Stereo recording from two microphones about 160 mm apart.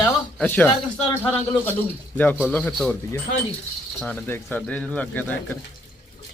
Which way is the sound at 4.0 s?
10° left (ahead or behind).